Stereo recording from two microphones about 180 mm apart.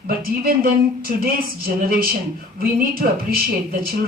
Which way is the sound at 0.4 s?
55° right (ahead or behind).